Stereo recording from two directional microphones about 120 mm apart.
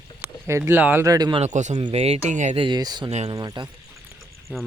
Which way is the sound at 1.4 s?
80° right.